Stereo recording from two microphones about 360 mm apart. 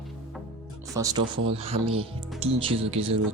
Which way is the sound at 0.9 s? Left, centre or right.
Centre.